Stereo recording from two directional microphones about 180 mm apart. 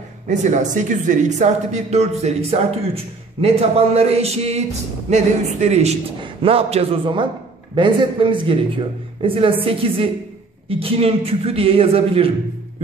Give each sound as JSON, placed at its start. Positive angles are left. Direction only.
{"t": 0.3, "sound": "a man's voice", "side_deg": -40}